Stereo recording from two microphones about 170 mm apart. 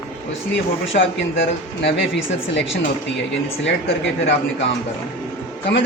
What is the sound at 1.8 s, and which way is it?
Speech, 90° left.